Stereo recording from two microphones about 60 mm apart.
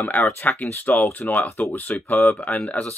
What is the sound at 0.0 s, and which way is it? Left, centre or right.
Speech, left.